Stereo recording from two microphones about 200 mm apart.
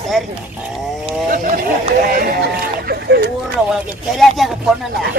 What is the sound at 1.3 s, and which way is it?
Speech, 45° right (ahead or behind).